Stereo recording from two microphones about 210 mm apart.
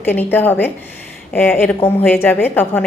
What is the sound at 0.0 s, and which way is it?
A woman's voice, 10° left (ahead or behind).